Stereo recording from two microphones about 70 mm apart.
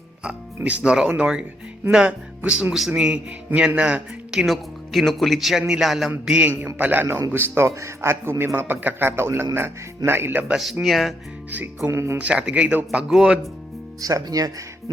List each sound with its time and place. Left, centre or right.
0.2 s music: centre
0.8 s speech: centre
6.7 s a man's voice: right
10.5 s speech: centre
11.9 s a man's voice: right
12.1 s speech: centre
14.0 s speech: right